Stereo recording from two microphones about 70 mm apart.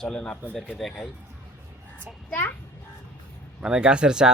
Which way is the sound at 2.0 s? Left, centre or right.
Left.